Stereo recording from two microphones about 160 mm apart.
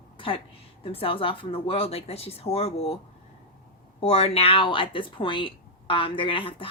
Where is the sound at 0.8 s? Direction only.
35° left (ahead or behind).